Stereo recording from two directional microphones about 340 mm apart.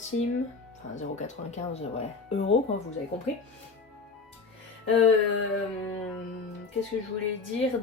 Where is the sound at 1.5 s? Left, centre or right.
Centre.